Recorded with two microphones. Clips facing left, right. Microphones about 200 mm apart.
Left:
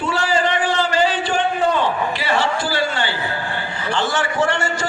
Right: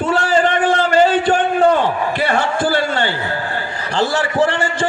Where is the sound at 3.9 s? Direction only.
35° right (ahead or behind).